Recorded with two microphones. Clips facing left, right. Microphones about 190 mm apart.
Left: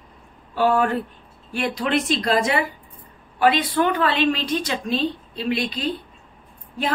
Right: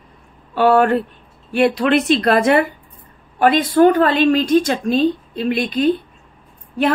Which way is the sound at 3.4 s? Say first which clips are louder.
Right 7 dB; 45° right (ahead or behind).